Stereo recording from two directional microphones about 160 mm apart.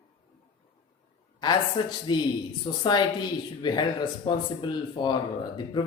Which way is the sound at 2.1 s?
30° left (ahead or behind).